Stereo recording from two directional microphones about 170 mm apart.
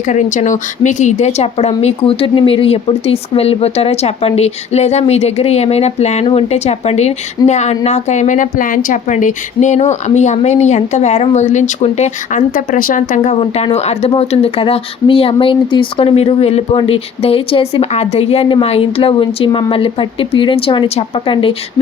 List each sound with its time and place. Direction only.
0.0 s a woman's voice: 45° left (ahead or behind)